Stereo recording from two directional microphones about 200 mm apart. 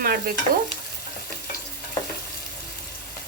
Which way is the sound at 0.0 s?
50° right (ahead or behind).